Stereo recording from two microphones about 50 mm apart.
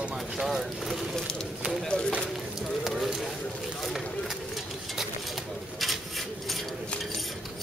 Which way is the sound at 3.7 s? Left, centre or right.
Centre.